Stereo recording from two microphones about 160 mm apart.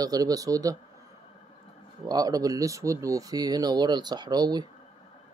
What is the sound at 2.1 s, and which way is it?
Speech, 25° right (ahead or behind).